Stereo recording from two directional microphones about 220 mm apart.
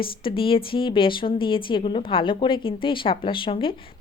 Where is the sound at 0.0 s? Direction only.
25° left (ahead or behind).